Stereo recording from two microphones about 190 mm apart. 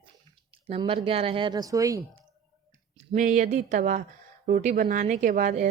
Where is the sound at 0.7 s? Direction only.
30° right (ahead or behind).